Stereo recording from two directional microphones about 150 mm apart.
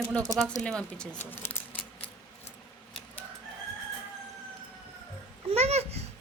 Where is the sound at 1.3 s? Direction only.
15° left (ahead or behind).